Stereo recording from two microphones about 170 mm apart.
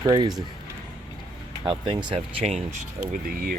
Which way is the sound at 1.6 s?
25° right (ahead or behind).